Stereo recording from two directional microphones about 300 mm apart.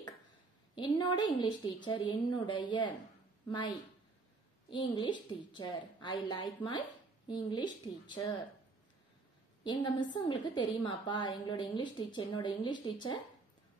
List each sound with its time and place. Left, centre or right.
0.7 s a woman's voice: centre
9.7 s a woman's voice: centre